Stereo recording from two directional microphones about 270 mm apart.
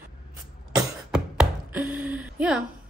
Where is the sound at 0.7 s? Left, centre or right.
Centre.